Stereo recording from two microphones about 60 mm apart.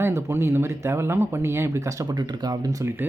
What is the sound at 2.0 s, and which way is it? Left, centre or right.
Speech, right.